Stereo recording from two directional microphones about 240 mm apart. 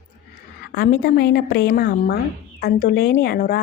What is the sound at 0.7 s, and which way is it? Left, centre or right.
Speech, left.